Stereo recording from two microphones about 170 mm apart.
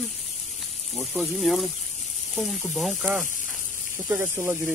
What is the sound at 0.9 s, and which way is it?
Speech, centre (ahead or behind).